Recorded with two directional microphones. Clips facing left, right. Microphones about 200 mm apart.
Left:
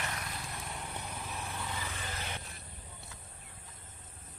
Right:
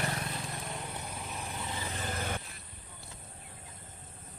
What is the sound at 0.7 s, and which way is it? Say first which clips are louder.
Vehicle: right 2 dB; 10° right (ahead or behind).